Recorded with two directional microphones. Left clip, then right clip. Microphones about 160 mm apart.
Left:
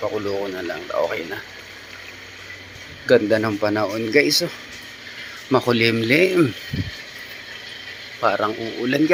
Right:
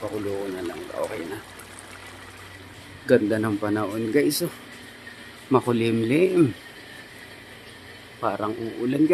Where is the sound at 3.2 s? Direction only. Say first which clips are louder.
Left 5 dB; centre (ahead or behind).